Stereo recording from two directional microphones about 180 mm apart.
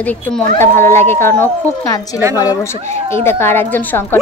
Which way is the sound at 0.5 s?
15° left (ahead or behind).